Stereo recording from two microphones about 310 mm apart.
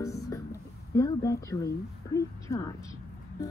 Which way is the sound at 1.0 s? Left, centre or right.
Centre.